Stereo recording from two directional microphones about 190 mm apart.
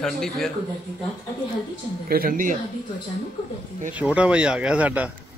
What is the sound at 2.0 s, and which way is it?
Speech, 50° right (ahead or behind).